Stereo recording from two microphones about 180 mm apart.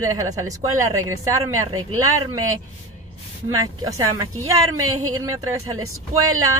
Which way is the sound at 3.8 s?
20° right (ahead or behind).